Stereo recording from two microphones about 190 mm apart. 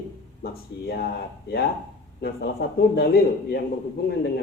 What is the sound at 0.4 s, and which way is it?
A man's voice, 55° left (ahead or behind).